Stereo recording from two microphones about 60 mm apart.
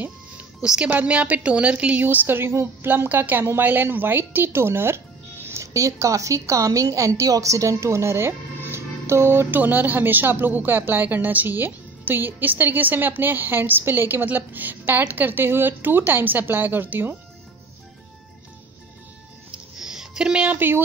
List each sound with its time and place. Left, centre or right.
0.6 s a woman's voice: centre
2.0 s a woman's voice: right
9.6 s speech: right
19.5 s music: centre
20.4 s speech: right